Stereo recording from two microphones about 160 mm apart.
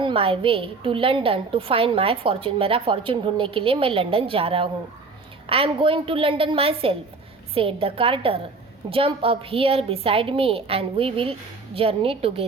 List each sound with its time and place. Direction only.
0.0 s a woman's voice: 35° right (ahead or behind)